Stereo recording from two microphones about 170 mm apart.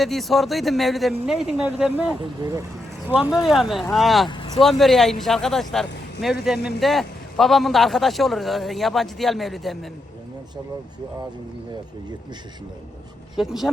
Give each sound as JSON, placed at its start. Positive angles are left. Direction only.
{"t": 0.0, "sound": "a man's voice", "side_deg": 0}
{"t": 2.2, "sound": "speech", "side_deg": -25}
{"t": 3.1, "sound": "a man's voice", "side_deg": -5}
{"t": 13.3, "sound": "a man's voice", "side_deg": 0}